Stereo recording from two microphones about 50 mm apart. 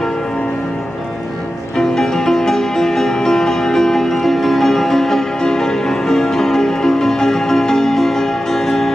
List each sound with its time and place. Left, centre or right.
1.8 s music: centre